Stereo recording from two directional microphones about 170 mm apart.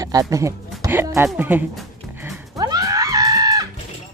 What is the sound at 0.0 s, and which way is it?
Speech, 20° right (ahead or behind).